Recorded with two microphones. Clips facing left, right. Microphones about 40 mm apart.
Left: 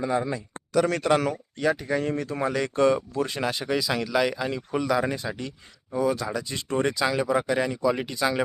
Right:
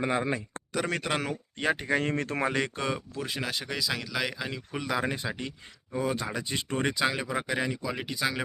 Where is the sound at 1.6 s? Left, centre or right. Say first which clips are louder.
Left 1 dB; right.